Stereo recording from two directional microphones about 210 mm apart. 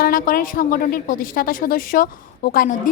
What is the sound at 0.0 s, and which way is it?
A woman's voice, 40° left (ahead or behind).